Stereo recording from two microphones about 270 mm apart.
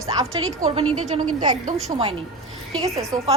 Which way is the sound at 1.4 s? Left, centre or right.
Right.